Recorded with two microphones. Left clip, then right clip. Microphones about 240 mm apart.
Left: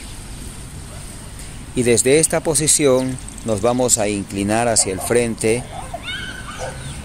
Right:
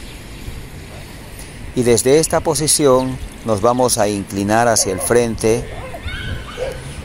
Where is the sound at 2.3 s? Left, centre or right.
Centre.